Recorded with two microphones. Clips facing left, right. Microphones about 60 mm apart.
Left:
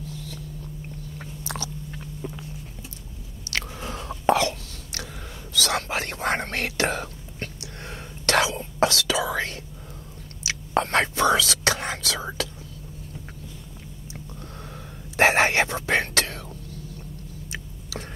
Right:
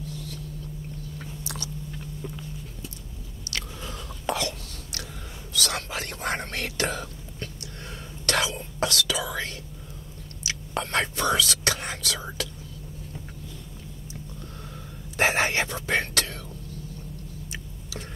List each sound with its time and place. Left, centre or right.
1.4 s biting: left
3.5 s biting: left
4.1 s a sound: left
5.6 s speech: left
5.9 s whispering: left
8.8 s speech: left
10.8 s whispering: left
11.1 s whispering: left
15.1 s whispering: left